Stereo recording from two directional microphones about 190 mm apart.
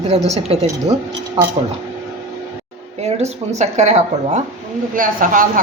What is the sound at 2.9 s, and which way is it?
A woman's voice, 35° right (ahead or behind).